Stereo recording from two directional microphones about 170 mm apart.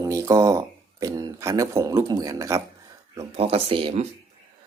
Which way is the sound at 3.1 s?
20° right (ahead or behind).